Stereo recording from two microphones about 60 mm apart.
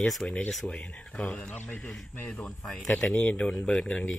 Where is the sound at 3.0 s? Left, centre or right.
Left.